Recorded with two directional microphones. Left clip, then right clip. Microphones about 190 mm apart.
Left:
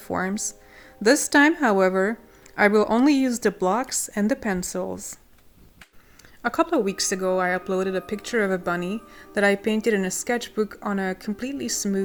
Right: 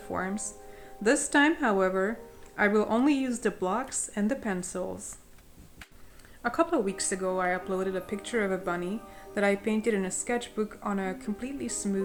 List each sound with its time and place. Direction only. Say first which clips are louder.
0.1 s speech: left 6 dB; 40° left (ahead or behind)
6.4 s speech: left 5 dB; 35° left (ahead or behind)